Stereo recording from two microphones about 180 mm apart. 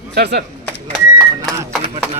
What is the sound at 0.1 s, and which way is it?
Speech, 65° right (ahead or behind).